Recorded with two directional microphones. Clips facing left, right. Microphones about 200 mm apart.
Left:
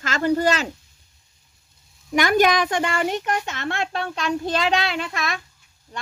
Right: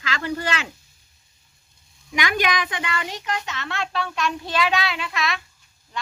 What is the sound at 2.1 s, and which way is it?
Speech, 45° left (ahead or behind).